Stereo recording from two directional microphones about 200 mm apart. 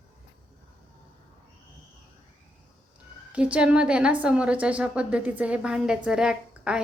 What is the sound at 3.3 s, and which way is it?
A woman's voice, 5° right (ahead or behind).